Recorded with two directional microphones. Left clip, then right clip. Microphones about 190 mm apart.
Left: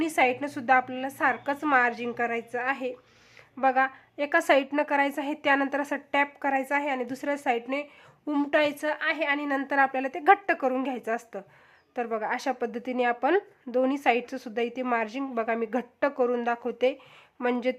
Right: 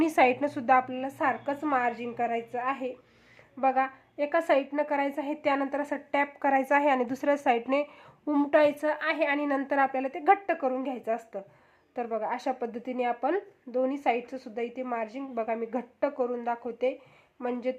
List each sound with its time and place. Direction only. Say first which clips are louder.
0.0 s a woman's voice: right 1 dB; 5° right (ahead or behind); by 6.3 s 15° left (ahead or behind)
6.4 s a woman's voice: right 3 dB; centre (ahead or behind); by 17.7 s 25° left (ahead or behind)